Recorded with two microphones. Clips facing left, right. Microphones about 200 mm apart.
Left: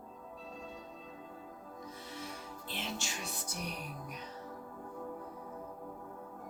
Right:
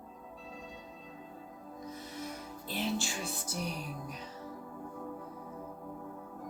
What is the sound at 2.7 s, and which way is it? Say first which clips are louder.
Music: right 8 dB; 40° right (ahead or behind).